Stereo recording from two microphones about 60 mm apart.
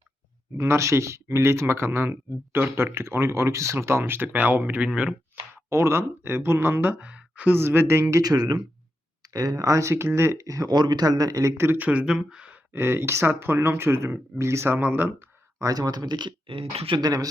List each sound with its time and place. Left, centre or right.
0.5 s speech: right; by 5.1 s centre
5.6 s speech: right
7.0 s a sound: right
7.5 s speech: right
8.2 s speech: right
9.9 s speech: right
10.4 s speech: right
11.5 s speech: right
11.8 s speech: right
12.7 s speech: right
14.8 s speech: right
15.5 s speech: right